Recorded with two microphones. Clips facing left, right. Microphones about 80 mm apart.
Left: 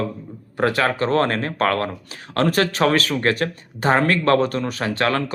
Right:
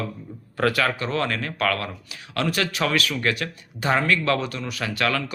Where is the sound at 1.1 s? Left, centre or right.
Left.